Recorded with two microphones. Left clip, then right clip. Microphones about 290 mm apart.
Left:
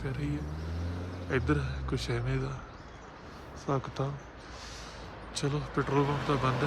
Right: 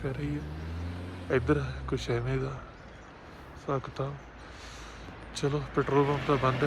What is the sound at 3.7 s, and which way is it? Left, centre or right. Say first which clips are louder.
Speech: even; centre.